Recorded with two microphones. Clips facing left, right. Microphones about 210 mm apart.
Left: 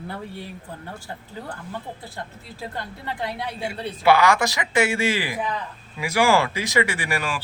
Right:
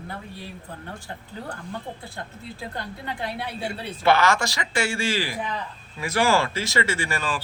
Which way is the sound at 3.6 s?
10° left (ahead or behind).